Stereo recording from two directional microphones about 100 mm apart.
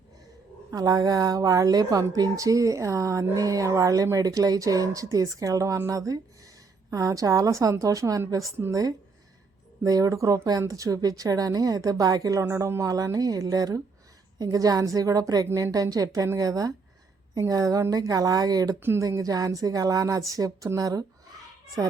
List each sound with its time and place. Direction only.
0.7 s a woman's voice: 35° right (ahead or behind)
9.8 s a woman's voice: 35° right (ahead or behind)
18.8 s speech: 25° right (ahead or behind)
19.0 s a woman's voice: 35° right (ahead or behind)